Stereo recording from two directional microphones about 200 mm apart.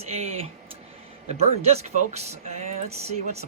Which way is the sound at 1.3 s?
30° right (ahead or behind).